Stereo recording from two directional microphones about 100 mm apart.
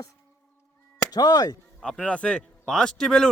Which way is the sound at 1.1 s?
40° left (ahead or behind).